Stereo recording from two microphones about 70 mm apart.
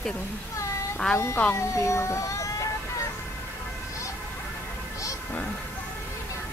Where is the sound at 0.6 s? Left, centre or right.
Left.